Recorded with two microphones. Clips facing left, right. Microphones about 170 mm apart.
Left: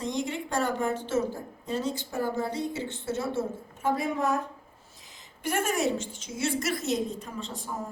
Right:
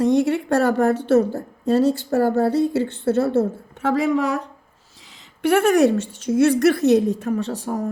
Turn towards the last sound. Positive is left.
turn(degrees=-70)  # may be behind; listen again after turning